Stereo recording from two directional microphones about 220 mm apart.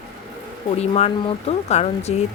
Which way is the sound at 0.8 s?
30° left (ahead or behind).